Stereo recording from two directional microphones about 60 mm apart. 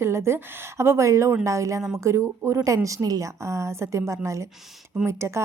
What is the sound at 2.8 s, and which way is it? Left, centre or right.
Speech, right.